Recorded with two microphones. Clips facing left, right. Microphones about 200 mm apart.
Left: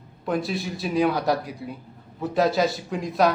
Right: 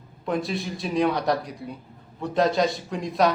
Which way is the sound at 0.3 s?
Centre (ahead or behind).